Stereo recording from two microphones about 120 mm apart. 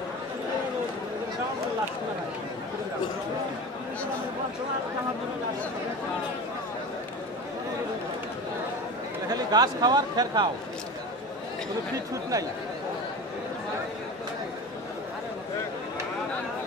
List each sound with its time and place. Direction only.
9.3 s speech: 35° right (ahead or behind)